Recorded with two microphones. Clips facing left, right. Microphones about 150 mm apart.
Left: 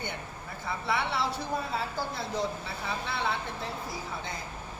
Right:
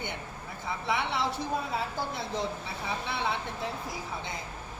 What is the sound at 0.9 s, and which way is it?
Speech, 20° right (ahead or behind).